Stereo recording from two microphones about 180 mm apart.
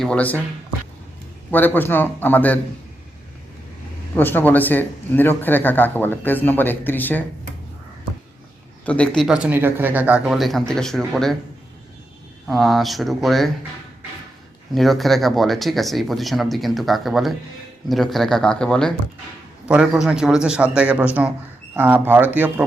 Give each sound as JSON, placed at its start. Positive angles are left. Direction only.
{"t": 0.0, "sound": "speech", "side_deg": 5}
{"t": 1.5, "sound": "speech", "side_deg": 10}
{"t": 4.1, "sound": "speech", "side_deg": 10}
{"t": 8.9, "sound": "speech", "side_deg": 5}
{"t": 12.5, "sound": "speech", "side_deg": 0}
{"t": 14.7, "sound": "speech", "side_deg": 0}